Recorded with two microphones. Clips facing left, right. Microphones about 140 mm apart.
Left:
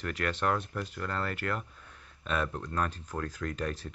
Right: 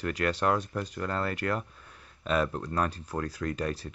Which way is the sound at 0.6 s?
40° right (ahead or behind).